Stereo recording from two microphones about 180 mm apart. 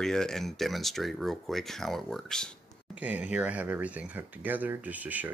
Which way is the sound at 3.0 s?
10° right (ahead or behind).